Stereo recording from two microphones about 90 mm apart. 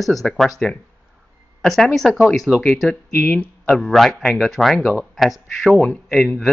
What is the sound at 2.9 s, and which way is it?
Speech, 15° left (ahead or behind).